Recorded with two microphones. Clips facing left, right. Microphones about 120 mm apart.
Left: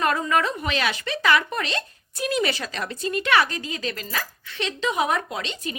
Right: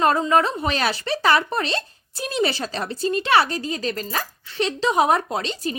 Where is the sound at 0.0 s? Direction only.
30° right (ahead or behind).